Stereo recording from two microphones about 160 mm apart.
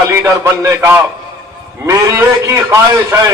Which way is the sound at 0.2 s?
15° right (ahead or behind).